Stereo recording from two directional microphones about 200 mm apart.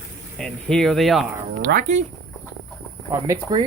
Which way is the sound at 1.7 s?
55° right (ahead or behind).